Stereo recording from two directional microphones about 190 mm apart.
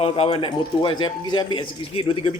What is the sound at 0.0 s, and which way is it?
A man's voice, 30° left (ahead or behind).